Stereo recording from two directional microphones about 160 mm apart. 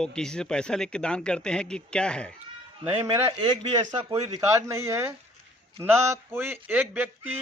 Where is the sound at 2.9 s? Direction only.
15° right (ahead or behind).